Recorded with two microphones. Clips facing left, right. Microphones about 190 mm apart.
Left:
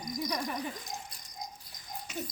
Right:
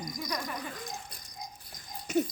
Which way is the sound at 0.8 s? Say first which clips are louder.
Right 2 dB; 55° right (ahead or behind).